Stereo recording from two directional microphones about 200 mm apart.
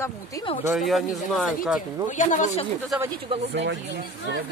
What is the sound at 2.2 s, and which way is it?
Speech, 40° left (ahead or behind).